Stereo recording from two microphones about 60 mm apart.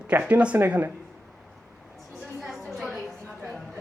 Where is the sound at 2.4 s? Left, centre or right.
Centre.